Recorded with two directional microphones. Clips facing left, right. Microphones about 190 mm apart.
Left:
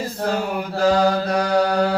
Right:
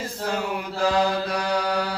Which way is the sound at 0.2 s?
50° left (ahead or behind).